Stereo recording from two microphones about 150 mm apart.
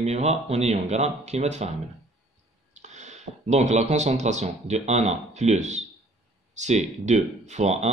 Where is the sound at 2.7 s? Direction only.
50° right (ahead or behind).